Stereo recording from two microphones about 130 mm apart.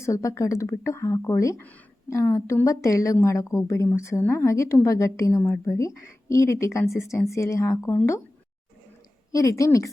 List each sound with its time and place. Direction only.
0.0 s a woman's voice: 25° left (ahead or behind)
9.3 s a woman's voice: 25° left (ahead or behind)